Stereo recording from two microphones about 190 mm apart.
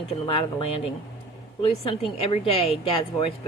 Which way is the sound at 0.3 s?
30° left (ahead or behind).